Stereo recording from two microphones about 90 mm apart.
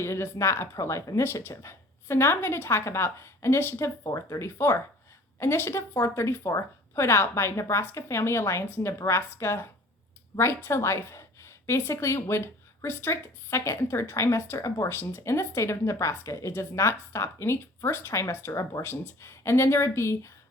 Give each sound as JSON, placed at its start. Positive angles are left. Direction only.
{"t": 0.0, "sound": "a woman's voice", "side_deg": 30}
{"t": 4.0, "sound": "a woman's voice", "side_deg": 35}